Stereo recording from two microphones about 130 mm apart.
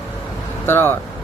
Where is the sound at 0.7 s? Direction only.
15° left (ahead or behind).